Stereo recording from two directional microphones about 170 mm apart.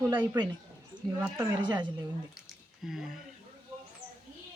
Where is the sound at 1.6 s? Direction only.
25° right (ahead or behind).